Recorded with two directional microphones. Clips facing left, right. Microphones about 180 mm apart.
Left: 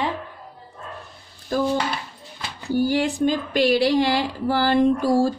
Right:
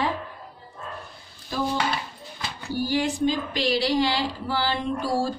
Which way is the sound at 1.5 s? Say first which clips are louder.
Left 6 dB; 50° left (ahead or behind).